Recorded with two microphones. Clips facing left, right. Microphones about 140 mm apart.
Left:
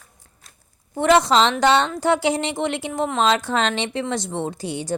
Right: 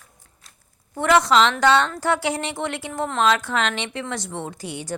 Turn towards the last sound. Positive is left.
turn(degrees=30)  # may be behind; listen again after turning